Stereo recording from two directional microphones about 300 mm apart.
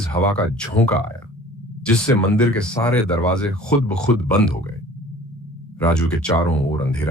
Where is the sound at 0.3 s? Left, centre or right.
Centre.